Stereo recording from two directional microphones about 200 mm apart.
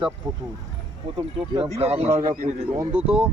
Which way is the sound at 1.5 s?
30° right (ahead or behind).